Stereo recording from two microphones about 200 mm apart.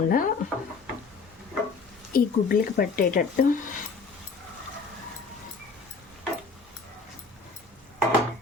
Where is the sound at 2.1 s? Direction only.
45° left (ahead or behind).